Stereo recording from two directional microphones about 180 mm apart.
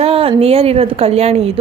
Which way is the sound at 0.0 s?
30° right (ahead or behind).